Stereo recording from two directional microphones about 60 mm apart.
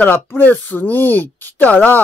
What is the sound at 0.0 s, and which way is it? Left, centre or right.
Speech, left.